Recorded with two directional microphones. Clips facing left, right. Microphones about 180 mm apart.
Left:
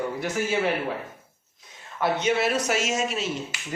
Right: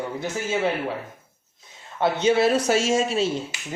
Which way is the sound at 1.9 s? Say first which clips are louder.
Right 4 dB; 30° right (ahead or behind).